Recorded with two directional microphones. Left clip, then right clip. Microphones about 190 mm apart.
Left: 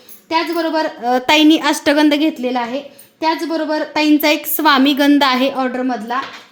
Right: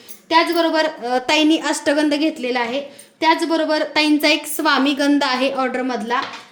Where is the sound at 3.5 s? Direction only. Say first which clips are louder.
Even; 15° left (ahead or behind).